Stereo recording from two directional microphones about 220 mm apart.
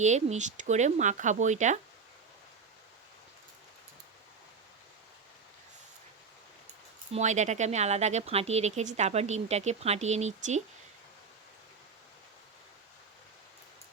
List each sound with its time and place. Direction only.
0.0 s speech: 30° right (ahead or behind)
7.1 s speech: 30° right (ahead or behind)